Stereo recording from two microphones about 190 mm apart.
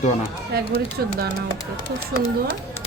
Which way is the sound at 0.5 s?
55° right (ahead or behind).